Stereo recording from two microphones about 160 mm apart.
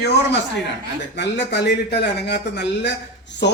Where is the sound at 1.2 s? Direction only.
90° left.